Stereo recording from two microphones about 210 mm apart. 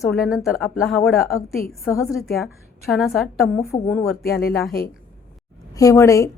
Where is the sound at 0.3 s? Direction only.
Centre (ahead or behind).